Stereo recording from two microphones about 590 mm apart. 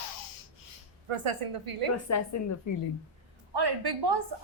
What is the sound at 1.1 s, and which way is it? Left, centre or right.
Speech, right.